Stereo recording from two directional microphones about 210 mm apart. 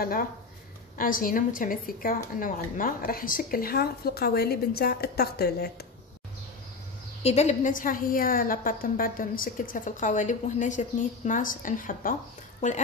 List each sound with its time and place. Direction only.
0.0 s a woman's voice: 45° left (ahead or behind)
7.2 s a woman's voice: 30° left (ahead or behind)